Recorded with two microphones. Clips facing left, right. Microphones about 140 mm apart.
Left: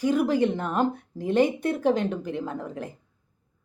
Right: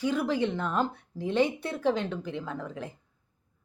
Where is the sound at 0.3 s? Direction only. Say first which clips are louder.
Left 4 dB; 45° left (ahead or behind).